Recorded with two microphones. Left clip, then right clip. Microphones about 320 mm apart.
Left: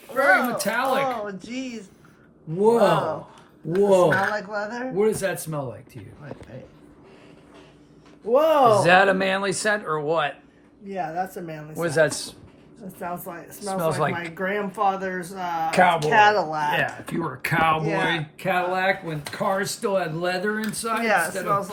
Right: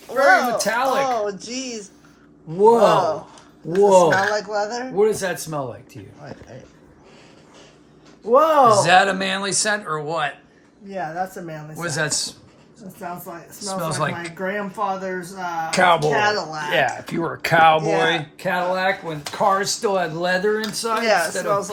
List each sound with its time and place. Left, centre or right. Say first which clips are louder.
0.1 s speech: right 4 dB; centre
8.2 s speech: right 3 dB; centre
11.4 s speech: left 1 dB; centre
13.6 s speech: even; centre
16.1 s speech: left 3 dB; left
17.2 s speech: right 7 dB; centre